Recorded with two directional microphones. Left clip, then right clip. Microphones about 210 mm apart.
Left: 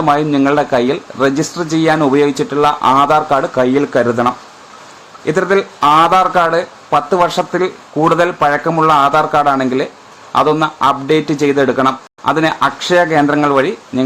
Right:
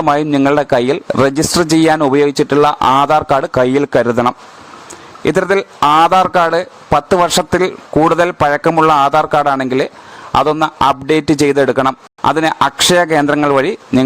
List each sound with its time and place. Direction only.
0.0 s speech: 50° right (ahead or behind)